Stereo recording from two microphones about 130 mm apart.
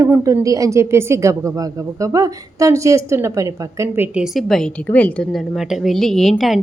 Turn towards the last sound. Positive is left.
turn(degrees=0)  # may be behind; listen again after turning